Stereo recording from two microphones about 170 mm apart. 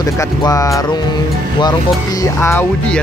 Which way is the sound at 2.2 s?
15° left (ahead or behind).